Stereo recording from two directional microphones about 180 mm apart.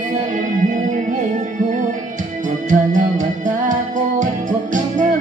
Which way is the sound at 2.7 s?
45° right (ahead or behind).